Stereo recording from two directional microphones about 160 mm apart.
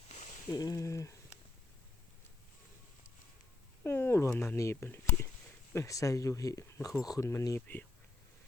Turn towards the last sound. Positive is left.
turn(degrees=10)  # may be behind; listen again after turning